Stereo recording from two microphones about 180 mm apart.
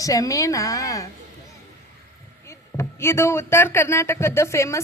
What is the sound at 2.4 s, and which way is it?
Speech, 15° left (ahead or behind).